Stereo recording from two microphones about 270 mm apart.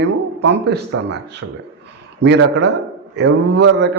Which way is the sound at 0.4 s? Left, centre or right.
Right.